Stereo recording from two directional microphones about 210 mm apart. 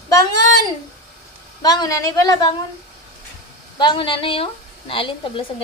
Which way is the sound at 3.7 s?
20° left (ahead or behind).